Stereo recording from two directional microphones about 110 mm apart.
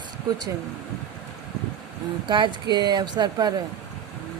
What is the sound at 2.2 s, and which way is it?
Speech, 45° right (ahead or behind).